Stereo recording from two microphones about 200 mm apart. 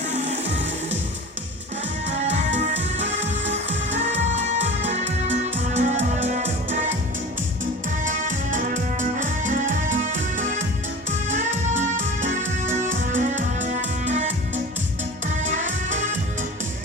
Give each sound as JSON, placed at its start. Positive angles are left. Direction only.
{"t": 2.3, "sound": "music", "side_deg": -35}
{"t": 8.0, "sound": "music", "side_deg": -40}